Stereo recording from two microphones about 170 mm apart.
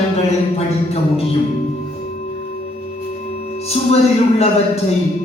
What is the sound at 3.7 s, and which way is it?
Speech, 40° left (ahead or behind).